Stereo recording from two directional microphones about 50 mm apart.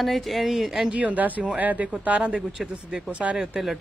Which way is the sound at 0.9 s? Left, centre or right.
Right.